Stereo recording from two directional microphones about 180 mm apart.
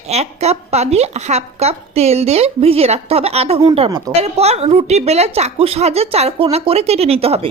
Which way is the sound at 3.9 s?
20° right (ahead or behind).